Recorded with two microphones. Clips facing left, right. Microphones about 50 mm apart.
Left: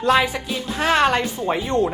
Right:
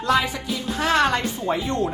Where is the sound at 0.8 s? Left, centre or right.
Left.